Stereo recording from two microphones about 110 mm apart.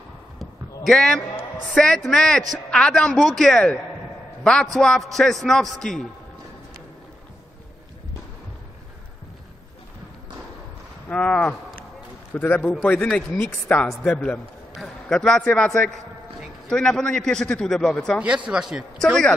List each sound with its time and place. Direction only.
0.4 s basketball bounce: centre (ahead or behind)
1.7 s a man's voice: 5° left (ahead or behind)
11.1 s a man's voice: 10° left (ahead or behind)
18.5 s a man's voice: 5° right (ahead or behind)